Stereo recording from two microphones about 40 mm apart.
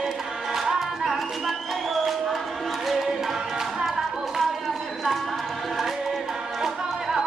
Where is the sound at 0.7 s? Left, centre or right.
Centre.